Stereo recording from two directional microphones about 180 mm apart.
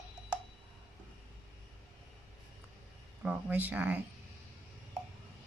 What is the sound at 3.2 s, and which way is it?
Speech, 10° right (ahead or behind).